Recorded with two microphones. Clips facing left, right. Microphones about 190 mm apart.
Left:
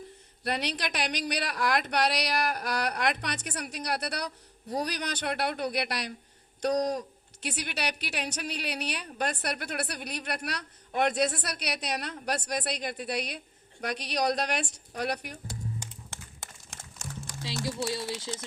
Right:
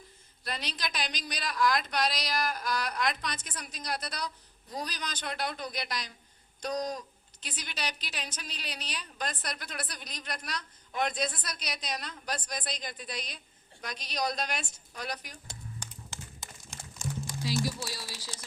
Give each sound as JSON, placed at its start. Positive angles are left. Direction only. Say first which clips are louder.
{"t": 0.4, "sound": "a woman's voice", "louder": "left 6 dB", "side_deg": 65}
{"t": 7.4, "sound": "a woman's voice", "louder": "left 6 dB", "side_deg": 70}
{"t": 16.0, "sound": "a sound", "louder": "even", "side_deg": 65}
{"t": 17.8, "sound": "speech", "louder": "left 9 dB", "side_deg": 25}